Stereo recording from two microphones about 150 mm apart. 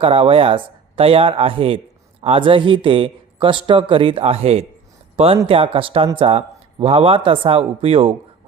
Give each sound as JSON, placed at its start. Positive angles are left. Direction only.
{"t": 0.0, "sound": "a man's voice", "side_deg": -40}